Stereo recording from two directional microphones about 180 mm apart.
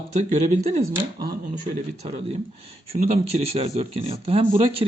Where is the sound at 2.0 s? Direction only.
35° right (ahead or behind).